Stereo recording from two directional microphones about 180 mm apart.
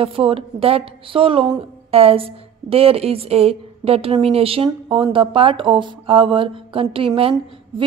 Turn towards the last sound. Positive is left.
turn(degrees=-30)  # may be behind; listen again after turning